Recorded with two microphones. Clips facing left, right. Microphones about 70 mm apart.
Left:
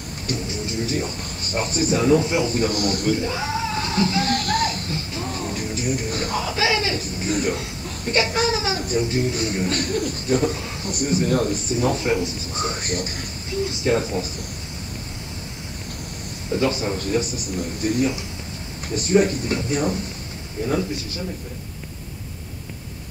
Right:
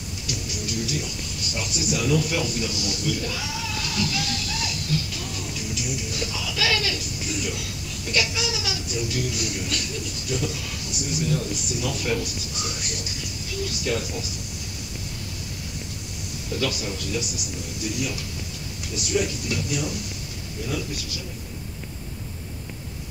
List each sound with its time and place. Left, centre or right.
0.3 s speech: left
3.2 s speech: left
4.3 s music: left
6.6 s speech: left
13.6 s speech: left
16.5 s speech: left